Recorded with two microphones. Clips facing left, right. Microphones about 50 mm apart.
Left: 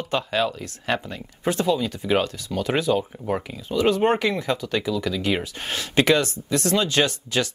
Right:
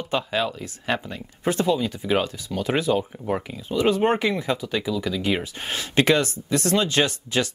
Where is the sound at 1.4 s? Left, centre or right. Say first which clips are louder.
Even; right.